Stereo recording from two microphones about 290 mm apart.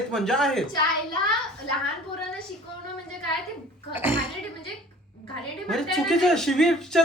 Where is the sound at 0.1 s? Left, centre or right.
Centre.